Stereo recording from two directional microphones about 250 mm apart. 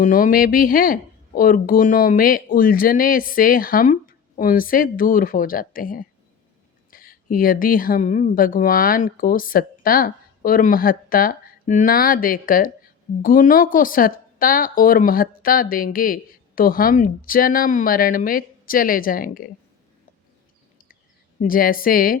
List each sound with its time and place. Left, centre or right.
0.0 s speech: left
21.4 s speech: left